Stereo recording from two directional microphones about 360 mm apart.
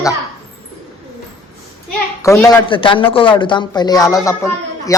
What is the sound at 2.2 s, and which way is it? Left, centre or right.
Speech, centre.